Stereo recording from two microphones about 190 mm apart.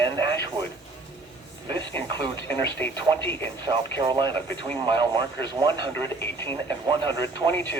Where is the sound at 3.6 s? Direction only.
25° right (ahead or behind).